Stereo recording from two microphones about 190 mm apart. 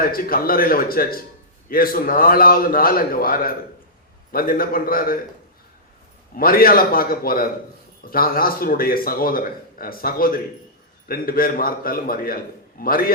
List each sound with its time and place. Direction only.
0.0 s speech: 50° left (ahead or behind)
6.3 s speech: 50° left (ahead or behind)